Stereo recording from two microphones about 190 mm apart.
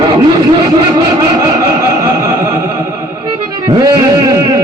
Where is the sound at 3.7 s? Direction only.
20° right (ahead or behind).